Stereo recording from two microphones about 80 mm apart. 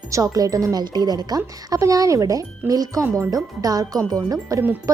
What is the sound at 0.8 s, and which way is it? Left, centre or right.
Speech, right.